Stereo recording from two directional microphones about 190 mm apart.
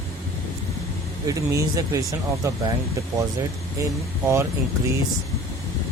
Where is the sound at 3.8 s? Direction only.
15° right (ahead or behind).